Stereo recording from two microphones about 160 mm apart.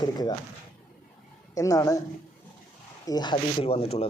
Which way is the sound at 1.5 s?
20° left (ahead or behind).